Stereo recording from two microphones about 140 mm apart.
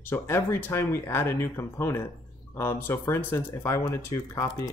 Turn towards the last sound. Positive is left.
turn(degrees=20)  # may be behind; listen again after turning